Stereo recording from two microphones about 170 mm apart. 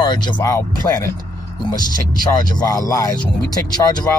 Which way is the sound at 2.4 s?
20° left (ahead or behind).